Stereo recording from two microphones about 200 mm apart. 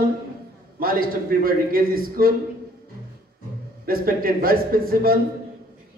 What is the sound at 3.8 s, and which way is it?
A man's voice, 45° right (ahead or behind).